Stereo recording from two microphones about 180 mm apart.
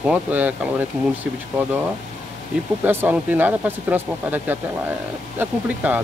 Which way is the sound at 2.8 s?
10° right (ahead or behind).